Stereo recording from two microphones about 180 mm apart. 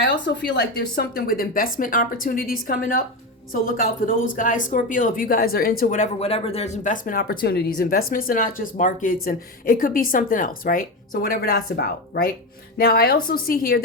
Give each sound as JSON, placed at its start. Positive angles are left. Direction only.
{"t": 0.0, "sound": "a woman's voice", "side_deg": 75}